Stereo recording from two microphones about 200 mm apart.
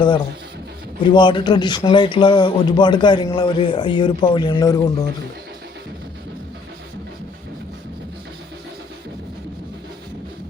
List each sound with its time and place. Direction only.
1.0 s speech: 25° left (ahead or behind)